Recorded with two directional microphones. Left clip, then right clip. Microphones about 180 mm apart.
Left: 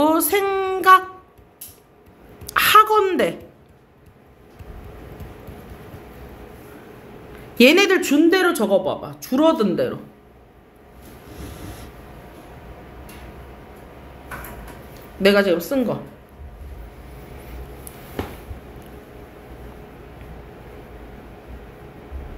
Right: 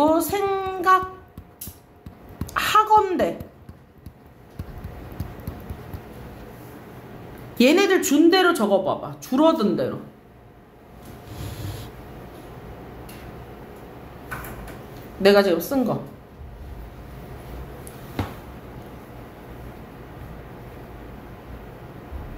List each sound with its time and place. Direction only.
0.0 s music: 50° left (ahead or behind)
2.4 s a sound: 50° left (ahead or behind)
7.5 s speech: 45° left (ahead or behind)
15.2 s speech: 30° left (ahead or behind)